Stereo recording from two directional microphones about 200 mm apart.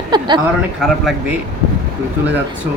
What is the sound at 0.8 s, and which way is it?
Speech, centre (ahead or behind).